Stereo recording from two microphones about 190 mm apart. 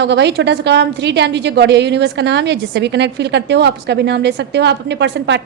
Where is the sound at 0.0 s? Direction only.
65° right (ahead or behind).